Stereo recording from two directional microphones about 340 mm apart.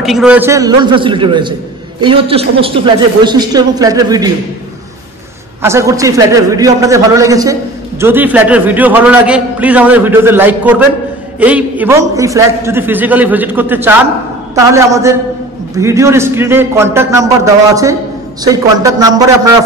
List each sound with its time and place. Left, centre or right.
0.0 s a man's voice: centre
5.6 s a man's voice: centre
18.4 s a man's voice: centre